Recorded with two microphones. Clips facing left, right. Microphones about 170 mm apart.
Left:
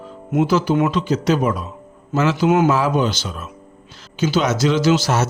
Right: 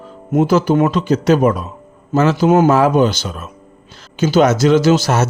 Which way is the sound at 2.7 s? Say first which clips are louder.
Right 6 dB; 50° right (ahead or behind).